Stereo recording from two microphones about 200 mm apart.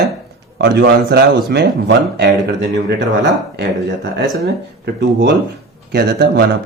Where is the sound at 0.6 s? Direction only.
55° right (ahead or behind).